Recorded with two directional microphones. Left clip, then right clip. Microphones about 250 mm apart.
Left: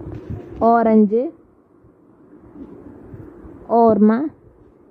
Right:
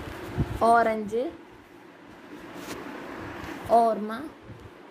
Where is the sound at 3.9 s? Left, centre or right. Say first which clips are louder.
Left 12 dB; left.